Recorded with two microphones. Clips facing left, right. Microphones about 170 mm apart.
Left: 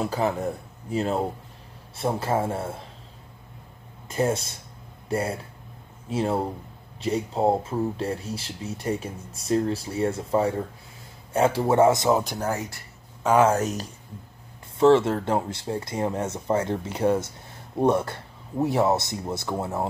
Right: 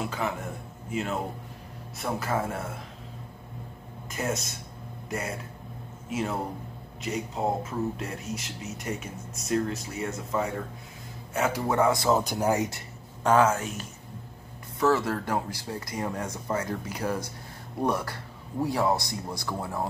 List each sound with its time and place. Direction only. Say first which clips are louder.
0.0 s speech: left 6 dB; 35° left (ahead or behind)
4.1 s speech: left 6 dB; 30° left (ahead or behind)
6.0 s speech: left 5 dB; 30° left (ahead or behind)
12.1 s speech: left 2 dB; centre (ahead or behind)
12.4 s speech: right 3 dB; 15° right (ahead or behind)
13.5 s speech: left 6 dB; 40° left (ahead or behind)
14.8 s speech: left 7 dB; 25° left (ahead or behind)